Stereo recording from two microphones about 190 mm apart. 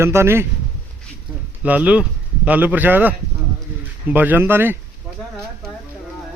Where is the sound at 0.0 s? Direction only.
15° right (ahead or behind).